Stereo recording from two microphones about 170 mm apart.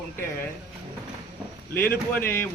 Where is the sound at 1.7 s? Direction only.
10° left (ahead or behind).